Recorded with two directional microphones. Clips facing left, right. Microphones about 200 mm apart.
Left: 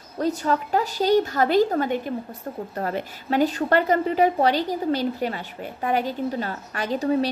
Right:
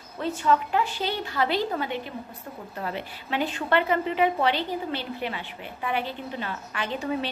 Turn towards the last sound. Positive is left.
turn(degrees=40)  # may be behind; listen again after turning